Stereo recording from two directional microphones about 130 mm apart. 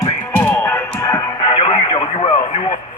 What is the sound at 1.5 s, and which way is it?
Speech, 45° left (ahead or behind).